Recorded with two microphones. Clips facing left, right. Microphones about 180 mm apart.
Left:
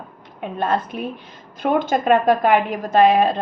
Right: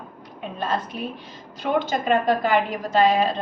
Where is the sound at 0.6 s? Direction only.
55° left (ahead or behind).